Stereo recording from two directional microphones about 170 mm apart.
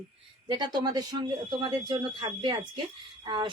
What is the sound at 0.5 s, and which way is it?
Speech, 25° right (ahead or behind).